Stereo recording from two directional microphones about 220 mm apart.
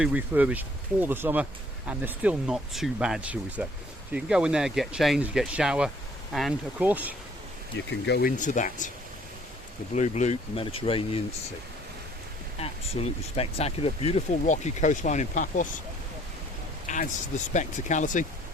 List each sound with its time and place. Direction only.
0.0 s speech: 5° right (ahead or behind)
7.8 s speech: 55° left (ahead or behind)
8.4 s speech: 35° left (ahead or behind)
9.9 s speech: 30° left (ahead or behind)
12.5 s speech: 25° left (ahead or behind)
16.8 s speech: 35° left (ahead or behind)